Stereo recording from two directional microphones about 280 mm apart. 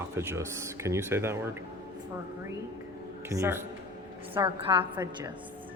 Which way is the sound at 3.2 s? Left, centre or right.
Centre.